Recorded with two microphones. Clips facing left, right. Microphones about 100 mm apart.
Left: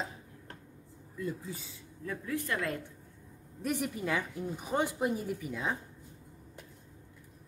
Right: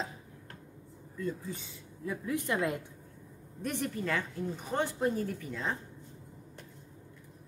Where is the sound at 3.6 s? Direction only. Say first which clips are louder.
Left 1 dB; 5° left (ahead or behind).